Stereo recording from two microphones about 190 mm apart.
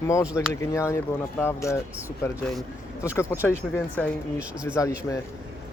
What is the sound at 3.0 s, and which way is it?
Speech, 15° left (ahead or behind).